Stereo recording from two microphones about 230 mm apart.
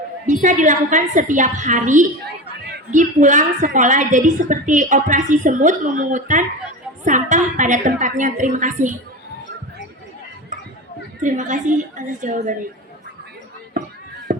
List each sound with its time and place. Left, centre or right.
0.3 s a woman's voice: right
11.2 s a woman's voice: right